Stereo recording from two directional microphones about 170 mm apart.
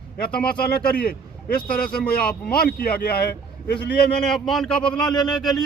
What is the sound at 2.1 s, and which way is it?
Speech, 65° left (ahead or behind).